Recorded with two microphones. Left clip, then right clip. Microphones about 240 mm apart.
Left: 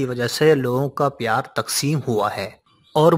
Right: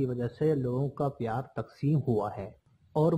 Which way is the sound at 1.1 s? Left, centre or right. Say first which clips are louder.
Left 13 dB; left.